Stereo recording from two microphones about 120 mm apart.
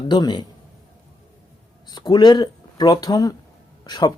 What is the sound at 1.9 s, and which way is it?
Speech, 35° left (ahead or behind).